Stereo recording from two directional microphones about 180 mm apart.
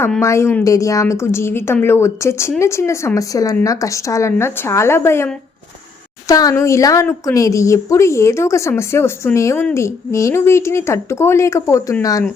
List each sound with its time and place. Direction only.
0.2 s a woman's voice: 15° left (ahead or behind)